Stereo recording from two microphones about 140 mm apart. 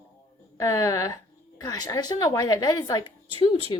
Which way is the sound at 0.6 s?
20° left (ahead or behind).